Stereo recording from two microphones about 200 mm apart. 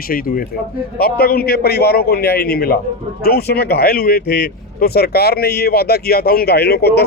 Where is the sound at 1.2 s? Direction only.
50° left (ahead or behind).